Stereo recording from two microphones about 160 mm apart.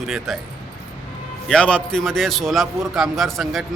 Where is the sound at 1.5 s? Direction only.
5° left (ahead or behind).